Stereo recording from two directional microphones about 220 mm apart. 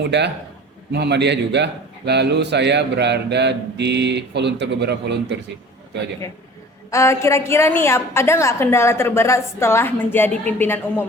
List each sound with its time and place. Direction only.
0.0 s a man's voice: 50° right (ahead or behind)
6.9 s a woman's voice: 15° left (ahead or behind)